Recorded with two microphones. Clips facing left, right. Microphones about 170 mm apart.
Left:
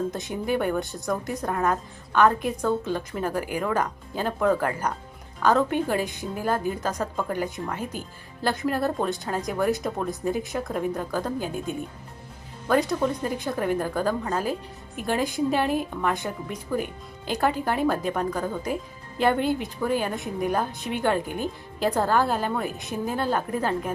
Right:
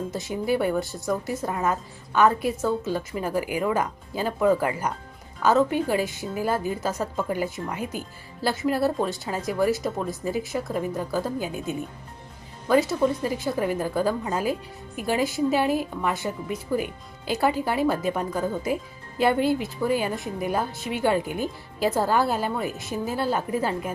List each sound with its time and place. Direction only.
0.1 s a woman's voice: 5° right (ahead or behind)